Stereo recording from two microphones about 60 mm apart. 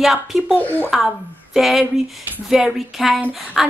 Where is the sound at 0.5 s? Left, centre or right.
Left.